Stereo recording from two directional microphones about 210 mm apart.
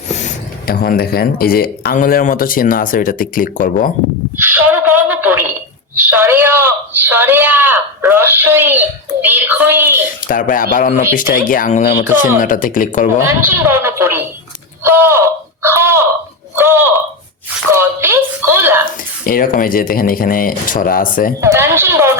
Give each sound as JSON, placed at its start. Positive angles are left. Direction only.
{"t": 0.7, "sound": "speech", "side_deg": 45}
{"t": 4.4, "sound": "a sound", "side_deg": -10}
{"t": 6.0, "sound": "a man's voice", "side_deg": -10}
{"t": 10.2, "sound": "speech", "side_deg": 40}
{"t": 13.2, "sound": "a woman's voice", "side_deg": -10}
{"t": 15.6, "sound": "a sound", "side_deg": -10}
{"t": 19.2, "sound": "speech", "side_deg": 45}
{"t": 21.4, "sound": "a woman's voice", "side_deg": -10}